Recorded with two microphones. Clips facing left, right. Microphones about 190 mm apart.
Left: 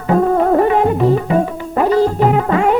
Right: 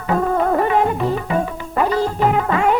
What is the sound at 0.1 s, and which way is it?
Music, 30° left (ahead or behind).